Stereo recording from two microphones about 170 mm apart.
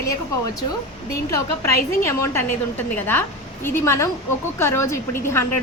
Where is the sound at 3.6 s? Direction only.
15° left (ahead or behind).